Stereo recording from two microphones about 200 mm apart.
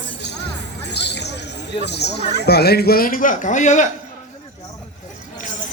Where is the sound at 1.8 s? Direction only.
55° left (ahead or behind); by 3.9 s 35° left (ahead or behind).